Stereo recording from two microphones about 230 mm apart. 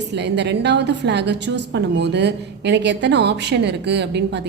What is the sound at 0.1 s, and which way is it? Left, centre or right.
A woman's voice, right.